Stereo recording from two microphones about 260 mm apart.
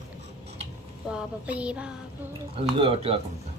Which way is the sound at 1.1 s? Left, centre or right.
Centre.